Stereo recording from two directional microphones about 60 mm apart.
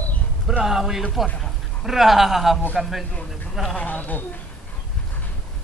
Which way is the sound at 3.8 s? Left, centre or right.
Left.